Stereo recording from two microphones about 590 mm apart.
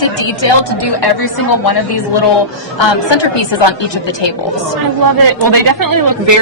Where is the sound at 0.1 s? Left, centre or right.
Left.